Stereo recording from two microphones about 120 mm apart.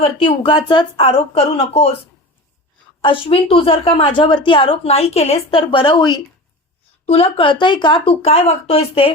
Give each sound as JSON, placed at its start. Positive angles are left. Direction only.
{"t": 0.0, "sound": "speech", "side_deg": 45}
{"t": 3.0, "sound": "speech", "side_deg": 45}
{"t": 7.0, "sound": "speech", "side_deg": 55}